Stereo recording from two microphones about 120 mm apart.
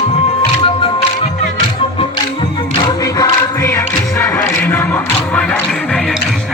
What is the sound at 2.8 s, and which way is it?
Choir, 30° left (ahead or behind).